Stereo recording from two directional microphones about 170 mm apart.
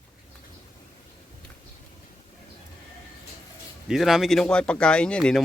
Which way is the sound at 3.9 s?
Centre (ahead or behind).